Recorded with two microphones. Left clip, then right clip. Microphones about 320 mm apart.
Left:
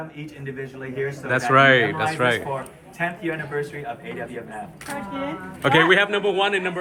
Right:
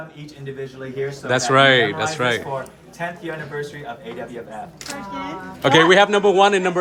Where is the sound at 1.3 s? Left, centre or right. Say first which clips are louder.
Right 1 dB; centre.